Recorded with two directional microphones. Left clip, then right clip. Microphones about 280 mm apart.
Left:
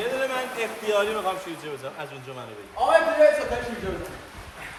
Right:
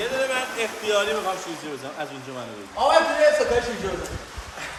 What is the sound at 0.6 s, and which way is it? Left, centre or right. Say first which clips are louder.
Speech: even; left.